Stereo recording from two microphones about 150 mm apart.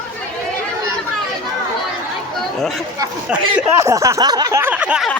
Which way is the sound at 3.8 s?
20° right (ahead or behind).